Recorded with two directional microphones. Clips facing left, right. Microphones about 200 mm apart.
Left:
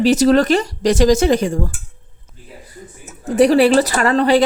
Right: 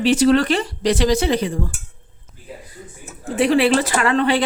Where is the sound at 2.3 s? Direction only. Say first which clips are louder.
Left 3 dB; centre (ahead or behind).